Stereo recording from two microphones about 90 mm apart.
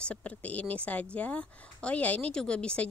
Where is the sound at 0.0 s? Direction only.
15° left (ahead or behind).